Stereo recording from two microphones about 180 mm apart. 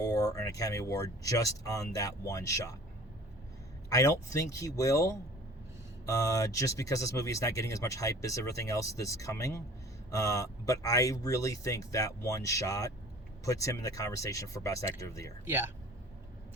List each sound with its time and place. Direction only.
0.0 s speech: 20° left (ahead or behind)
3.8 s speech: 20° left (ahead or behind)
15.4 s speech: 10° right (ahead or behind)